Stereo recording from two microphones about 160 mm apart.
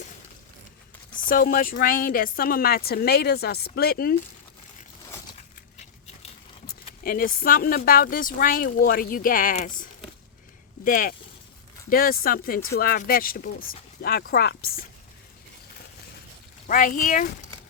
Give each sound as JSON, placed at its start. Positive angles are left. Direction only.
{"t": 1.3, "sound": "a woman's voice", "side_deg": 60}
{"t": 7.0, "sound": "a woman's voice", "side_deg": 65}
{"t": 16.6, "sound": "speech", "side_deg": 60}